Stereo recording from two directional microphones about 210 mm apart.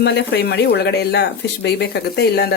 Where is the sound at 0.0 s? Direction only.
55° left (ahead or behind).